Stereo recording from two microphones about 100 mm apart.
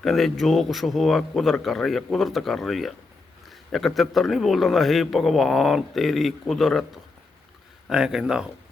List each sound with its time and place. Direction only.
0.0 s a man's voice: centre (ahead or behind)